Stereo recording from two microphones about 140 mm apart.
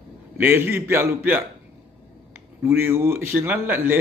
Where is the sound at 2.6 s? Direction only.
15° right (ahead or behind).